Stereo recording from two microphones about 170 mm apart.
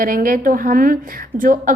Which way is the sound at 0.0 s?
55° right (ahead or behind).